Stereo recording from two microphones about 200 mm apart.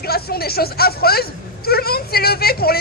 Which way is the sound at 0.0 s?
50° left (ahead or behind).